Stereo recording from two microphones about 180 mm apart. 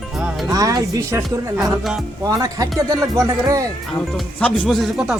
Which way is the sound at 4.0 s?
5° left (ahead or behind).